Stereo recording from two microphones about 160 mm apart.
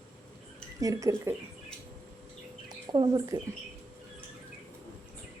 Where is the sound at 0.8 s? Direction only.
20° right (ahead or behind).